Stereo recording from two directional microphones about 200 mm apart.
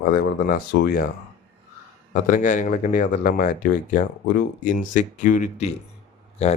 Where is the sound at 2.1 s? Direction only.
40° left (ahead or behind).